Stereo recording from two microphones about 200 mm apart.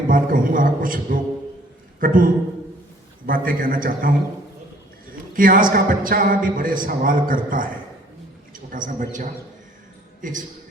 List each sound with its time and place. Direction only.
0.1 s a man's voice: 45° right (ahead or behind)
5.3 s a man's voice: 45° right (ahead or behind)